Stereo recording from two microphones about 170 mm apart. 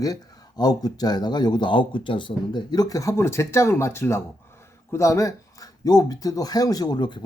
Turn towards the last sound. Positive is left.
turn(degrees=25)  # may be behind; listen again after turning